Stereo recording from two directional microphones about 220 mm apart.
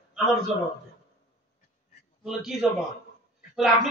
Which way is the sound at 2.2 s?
Centre (ahead or behind).